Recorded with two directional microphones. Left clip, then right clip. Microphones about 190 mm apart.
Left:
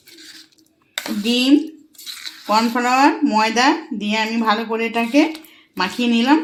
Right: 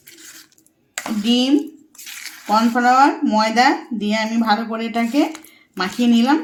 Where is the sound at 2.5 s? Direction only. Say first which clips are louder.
Right 2 dB; 15° left (ahead or behind).